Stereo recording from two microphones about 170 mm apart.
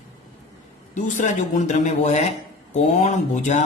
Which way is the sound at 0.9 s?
45° left (ahead or behind).